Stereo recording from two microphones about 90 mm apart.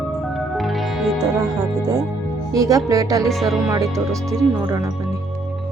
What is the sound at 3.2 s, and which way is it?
Speech, centre (ahead or behind).